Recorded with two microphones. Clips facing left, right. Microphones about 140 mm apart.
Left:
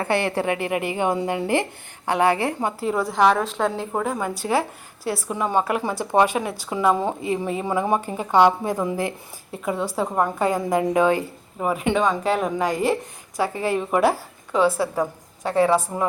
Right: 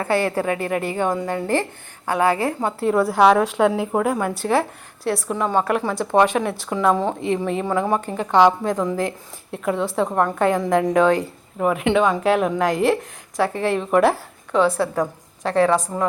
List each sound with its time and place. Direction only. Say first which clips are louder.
0.6 s a woman's voice: right 1 dB; 15° left (ahead or behind)
2.8 s a woman's voice: right 4 dB; centre (ahead or behind)